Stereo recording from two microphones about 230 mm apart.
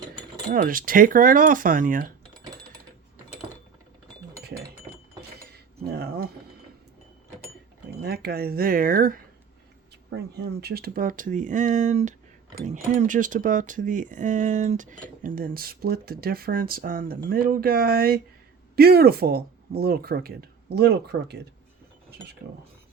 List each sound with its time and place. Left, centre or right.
0.5 s speech: right
5.9 s keys jangling: right
8.0 s speech: right